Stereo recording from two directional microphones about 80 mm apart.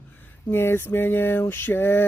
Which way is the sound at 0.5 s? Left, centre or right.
Left.